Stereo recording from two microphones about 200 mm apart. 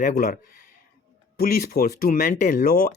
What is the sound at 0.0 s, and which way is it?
Speech, 45° left (ahead or behind).